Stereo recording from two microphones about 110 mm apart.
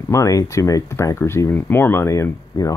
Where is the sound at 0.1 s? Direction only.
30° left (ahead or behind).